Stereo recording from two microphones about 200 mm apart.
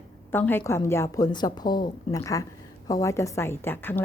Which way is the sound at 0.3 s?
10° left (ahead or behind).